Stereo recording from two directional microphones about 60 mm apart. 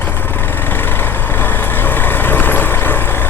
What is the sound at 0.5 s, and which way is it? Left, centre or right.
Vehicle, left.